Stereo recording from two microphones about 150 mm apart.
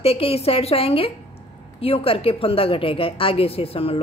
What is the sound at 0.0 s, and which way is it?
A woman's voice, 40° left (ahead or behind).